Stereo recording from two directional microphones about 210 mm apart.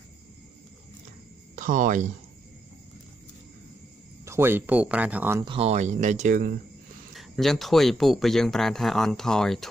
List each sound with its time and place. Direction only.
1.5 s speech: 40° right (ahead or behind)
4.2 s speech: 10° right (ahead or behind)
5.4 s speech: 25° right (ahead or behind)
7.2 s speech: centre (ahead or behind)